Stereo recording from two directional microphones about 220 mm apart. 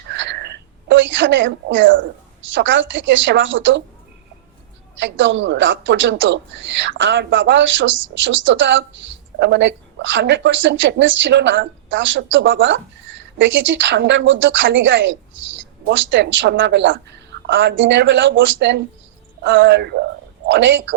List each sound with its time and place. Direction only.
0.1 s a sound: 55° right (ahead or behind)
2.5 s a woman's voice: 55° right (ahead or behind)
4.9 s a woman's voice: 55° right (ahead or behind)